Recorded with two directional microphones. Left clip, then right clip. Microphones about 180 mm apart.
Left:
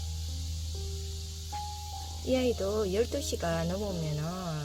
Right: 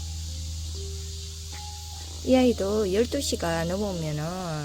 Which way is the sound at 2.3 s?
20° right (ahead or behind).